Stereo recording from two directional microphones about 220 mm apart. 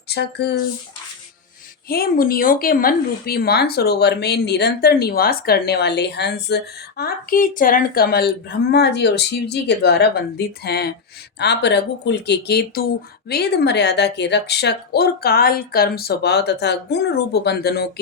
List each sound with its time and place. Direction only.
0.1 s a woman's voice: 50° left (ahead or behind)
1.9 s a woman's voice: 40° left (ahead or behind)